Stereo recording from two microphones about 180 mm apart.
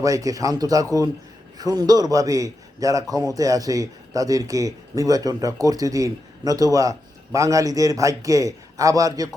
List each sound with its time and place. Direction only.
0.0 s a man's voice: 20° right (ahead or behind)